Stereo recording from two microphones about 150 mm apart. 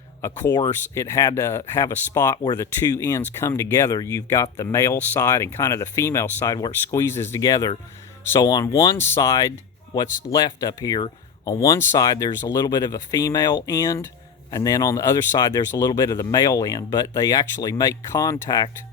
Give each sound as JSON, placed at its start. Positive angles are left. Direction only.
{"t": 0.7, "sound": "speech", "side_deg": 20}